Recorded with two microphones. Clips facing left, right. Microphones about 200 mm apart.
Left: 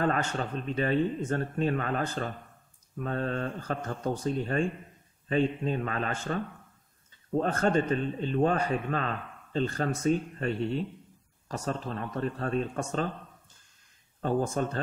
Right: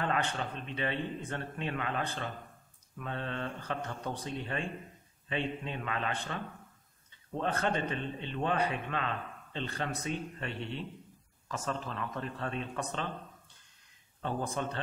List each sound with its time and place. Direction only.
0.0 s a man's voice: 40° left (ahead or behind)
7.3 s a man's voice: 45° left (ahead or behind)
14.2 s speech: 45° left (ahead or behind)